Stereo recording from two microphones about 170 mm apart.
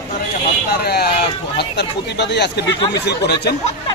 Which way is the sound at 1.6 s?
80° left.